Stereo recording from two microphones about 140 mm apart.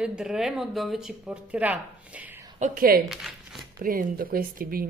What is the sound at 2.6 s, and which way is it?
Speech, 85° right.